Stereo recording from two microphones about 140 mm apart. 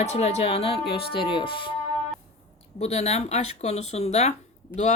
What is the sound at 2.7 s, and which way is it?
Speech, 50° left (ahead or behind).